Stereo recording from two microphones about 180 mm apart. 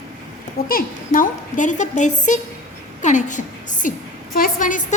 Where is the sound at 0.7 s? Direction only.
50° left (ahead or behind).